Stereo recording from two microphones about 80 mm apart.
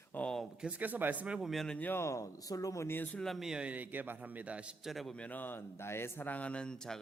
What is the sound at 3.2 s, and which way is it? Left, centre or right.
Speech, centre.